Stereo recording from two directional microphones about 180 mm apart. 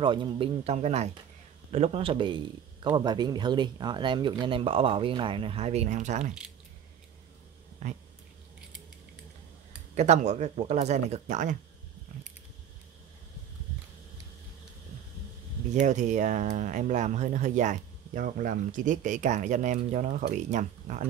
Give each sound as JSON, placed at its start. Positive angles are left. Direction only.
{"t": 0.0, "sound": "speech", "side_deg": -25}
{"t": 7.8, "sound": "speech", "side_deg": -40}
{"t": 9.9, "sound": "speech", "side_deg": -40}
{"t": 15.7, "sound": "speech", "side_deg": -40}